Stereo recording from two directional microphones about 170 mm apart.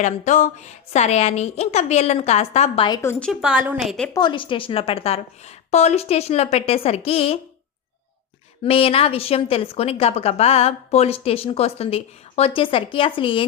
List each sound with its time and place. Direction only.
0.0 s a woman's voice: 45° left (ahead or behind)
2.9 s a woman's voice: 15° left (ahead or behind)
3.4 s a woman's voice: 10° right (ahead or behind)
4.1 s a woman's voice: 25° left (ahead or behind)
8.6 s a woman's voice: 35° left (ahead or behind)